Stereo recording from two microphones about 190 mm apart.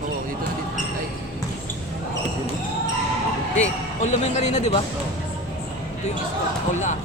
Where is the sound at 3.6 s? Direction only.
40° left (ahead or behind).